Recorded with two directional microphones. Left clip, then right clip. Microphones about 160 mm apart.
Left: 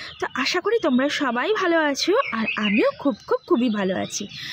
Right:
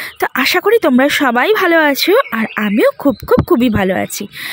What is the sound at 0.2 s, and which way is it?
Speech, 45° right (ahead or behind).